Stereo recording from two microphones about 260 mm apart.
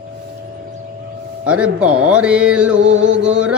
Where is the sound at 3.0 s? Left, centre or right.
Right.